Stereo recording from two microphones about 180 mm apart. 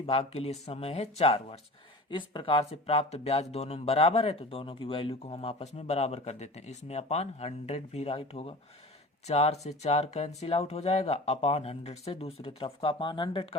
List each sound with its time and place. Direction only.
0.0 s speech: 35° left (ahead or behind)